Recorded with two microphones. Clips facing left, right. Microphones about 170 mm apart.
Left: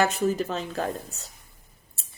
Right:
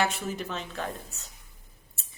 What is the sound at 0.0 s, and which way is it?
Speech, 40° left (ahead or behind).